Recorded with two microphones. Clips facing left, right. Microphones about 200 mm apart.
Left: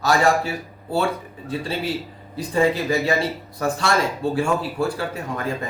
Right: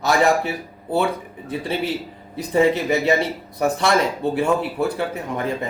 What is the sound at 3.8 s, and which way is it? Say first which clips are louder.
Speech: right 1 dB; 20° right (ahead or behind).